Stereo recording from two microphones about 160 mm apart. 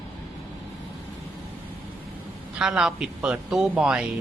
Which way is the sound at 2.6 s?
5° right (ahead or behind).